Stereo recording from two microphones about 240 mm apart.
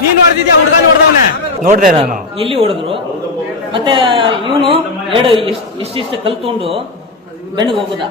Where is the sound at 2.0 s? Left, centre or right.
Right.